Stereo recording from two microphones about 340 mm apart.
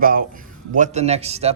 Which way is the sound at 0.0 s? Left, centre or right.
Right.